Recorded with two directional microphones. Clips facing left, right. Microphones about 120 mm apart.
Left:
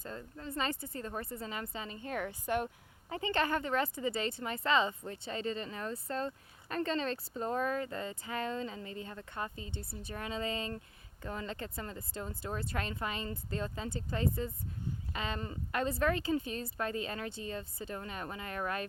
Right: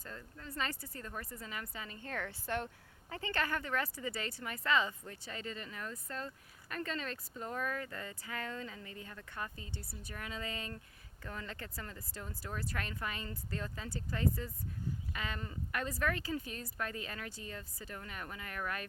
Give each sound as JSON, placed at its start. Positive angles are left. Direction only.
{"t": 0.0, "sound": "speech", "side_deg": 25}